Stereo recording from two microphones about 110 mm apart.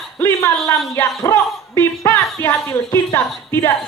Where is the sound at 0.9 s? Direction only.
25° left (ahead or behind).